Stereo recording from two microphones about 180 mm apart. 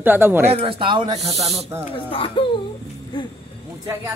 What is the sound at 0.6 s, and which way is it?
Speech, 30° right (ahead or behind).